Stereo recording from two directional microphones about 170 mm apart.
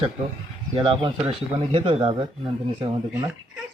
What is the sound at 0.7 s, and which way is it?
Speech, 30° right (ahead or behind).